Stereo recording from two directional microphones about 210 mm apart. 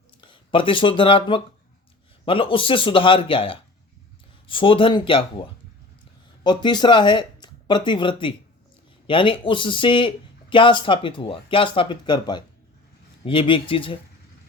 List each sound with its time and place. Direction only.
0.2 s speech: 25° left (ahead or behind)